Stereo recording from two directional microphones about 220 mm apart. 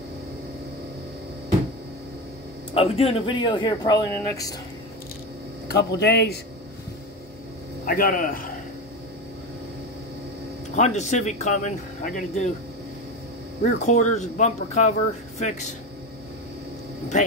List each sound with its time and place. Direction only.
2.7 s speech: 25° left (ahead or behind)
5.7 s speech: 50° left (ahead or behind)
7.8 s speech: 40° left (ahead or behind)
10.7 s speech: 30° left (ahead or behind)
13.7 s speech: 35° left (ahead or behind)